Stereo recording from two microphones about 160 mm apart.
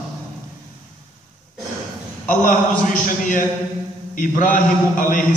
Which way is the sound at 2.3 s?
55° left (ahead or behind).